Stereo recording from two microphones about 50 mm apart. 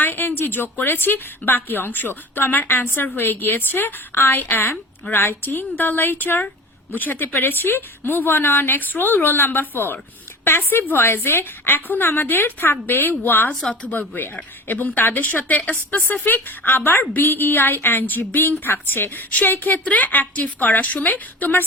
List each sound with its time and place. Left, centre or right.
0.0 s a woman's voice: left
5.1 s a woman's voice: left
13.5 s speech: centre
14.1 s a woman's voice: left